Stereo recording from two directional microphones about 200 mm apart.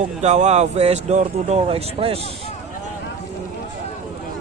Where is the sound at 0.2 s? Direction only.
35° right (ahead or behind).